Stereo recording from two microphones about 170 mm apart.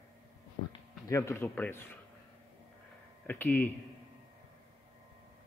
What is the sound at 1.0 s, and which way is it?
Speech, 20° left (ahead or behind).